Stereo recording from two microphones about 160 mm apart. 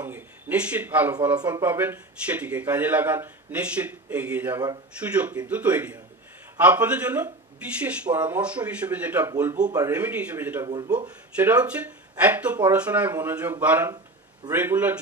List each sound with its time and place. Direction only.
0.0 s a sound: 10° right (ahead or behind)
1.4 s speech: 20° right (ahead or behind)
1.7 s speech: 10° right (ahead or behind)
9.7 s speech: 20° right (ahead or behind)
9.9 s speech: 10° right (ahead or behind)